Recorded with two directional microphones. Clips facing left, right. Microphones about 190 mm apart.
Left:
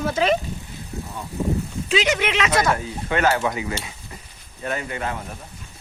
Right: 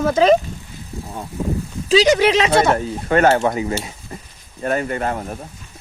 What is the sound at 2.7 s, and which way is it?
Stir, 45° right (ahead or behind).